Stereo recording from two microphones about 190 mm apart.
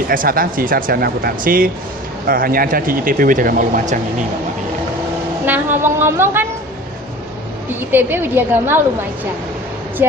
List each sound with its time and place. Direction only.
0.1 s speech: 45° right (ahead or behind)
5.5 s a woman's voice: 10° right (ahead or behind)
7.9 s a woman's voice: 10° right (ahead or behind)
10.0 s a woman's voice: 10° right (ahead or behind)